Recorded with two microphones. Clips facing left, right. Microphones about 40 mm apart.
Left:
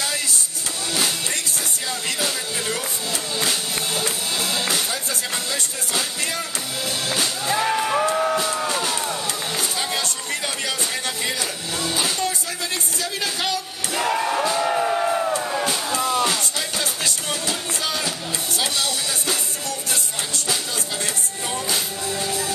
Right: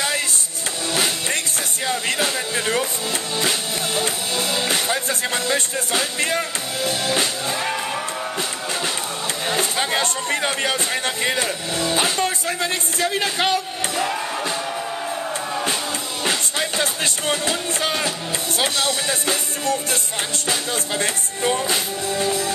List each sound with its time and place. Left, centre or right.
0.9 s music: right
7.6 s music: centre
8.4 s music: right
9.5 s speech: right
13.0 s music: right
14.1 s music: centre
14.6 s music: left
16.3 s music: right
21.0 s music: right